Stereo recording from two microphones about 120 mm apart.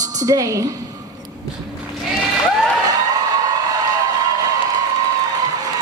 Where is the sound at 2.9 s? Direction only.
30° right (ahead or behind).